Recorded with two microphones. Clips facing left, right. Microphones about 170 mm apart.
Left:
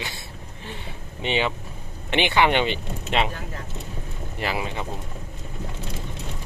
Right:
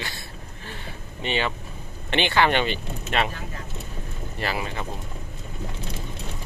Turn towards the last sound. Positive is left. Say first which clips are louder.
# left 1 dB
turn(degrees=15)  # may be behind; listen again after turning